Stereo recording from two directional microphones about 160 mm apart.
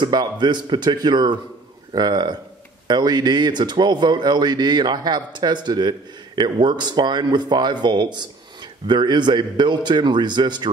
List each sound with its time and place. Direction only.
0.0 s speech: 25° right (ahead or behind)